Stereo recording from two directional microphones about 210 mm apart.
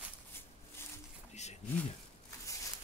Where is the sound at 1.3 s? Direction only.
30° left (ahead or behind).